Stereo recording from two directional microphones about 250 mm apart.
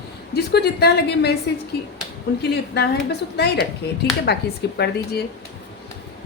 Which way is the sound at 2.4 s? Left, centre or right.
Left.